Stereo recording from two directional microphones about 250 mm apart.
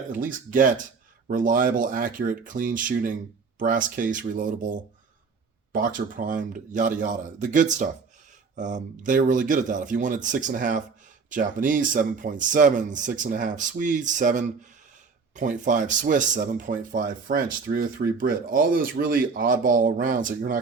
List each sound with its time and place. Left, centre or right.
0.2 s speech: right